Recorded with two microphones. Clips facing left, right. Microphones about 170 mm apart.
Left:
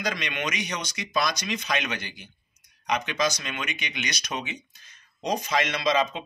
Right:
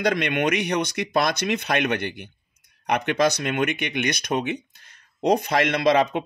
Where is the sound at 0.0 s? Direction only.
60° right (ahead or behind).